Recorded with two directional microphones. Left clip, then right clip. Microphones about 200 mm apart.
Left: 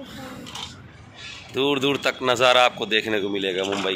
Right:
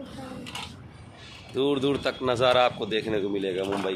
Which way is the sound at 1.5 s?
5° left (ahead or behind).